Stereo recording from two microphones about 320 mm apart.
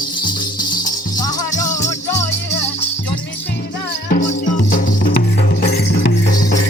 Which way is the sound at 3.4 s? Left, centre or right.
Left.